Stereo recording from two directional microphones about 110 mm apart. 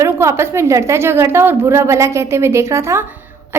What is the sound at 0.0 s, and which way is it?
A woman's voice, 25° right (ahead or behind).